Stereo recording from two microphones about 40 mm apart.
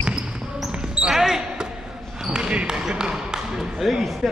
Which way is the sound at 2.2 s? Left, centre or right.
Right.